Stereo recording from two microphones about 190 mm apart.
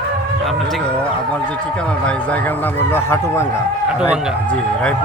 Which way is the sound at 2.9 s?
10° left (ahead or behind).